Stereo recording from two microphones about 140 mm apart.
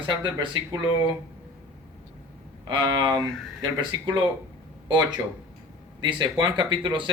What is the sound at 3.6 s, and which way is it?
Speech, 25° right (ahead or behind).